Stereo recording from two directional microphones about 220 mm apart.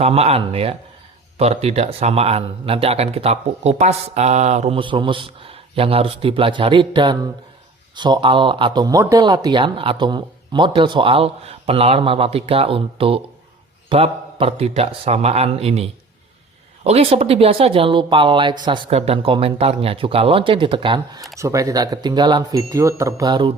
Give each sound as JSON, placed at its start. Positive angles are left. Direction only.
{"t": 0.0, "sound": "speech", "side_deg": -25}